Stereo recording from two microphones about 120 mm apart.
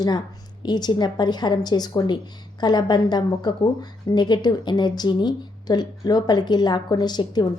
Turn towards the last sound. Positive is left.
turn(degrees=35)  # may be behind; listen again after turning